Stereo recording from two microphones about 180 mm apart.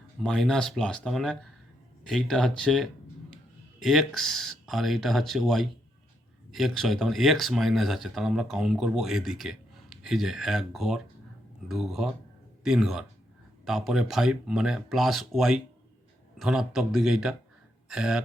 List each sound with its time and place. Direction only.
0.2 s speech: centre (ahead or behind)